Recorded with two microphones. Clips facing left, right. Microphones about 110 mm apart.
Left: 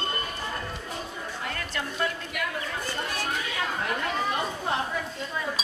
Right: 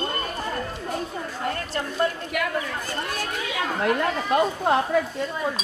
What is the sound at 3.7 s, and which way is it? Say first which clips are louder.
Speech: right 8 dB; 55° right (ahead or behind).